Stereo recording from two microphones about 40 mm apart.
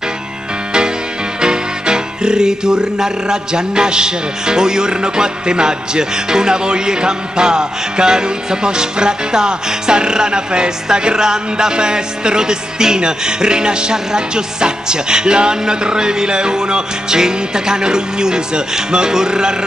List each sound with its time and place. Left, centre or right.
1.4 s music: centre